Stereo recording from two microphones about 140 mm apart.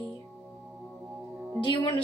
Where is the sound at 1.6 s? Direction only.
35° left (ahead or behind).